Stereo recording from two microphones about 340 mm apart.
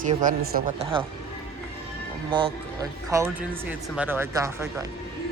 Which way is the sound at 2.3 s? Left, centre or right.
Centre.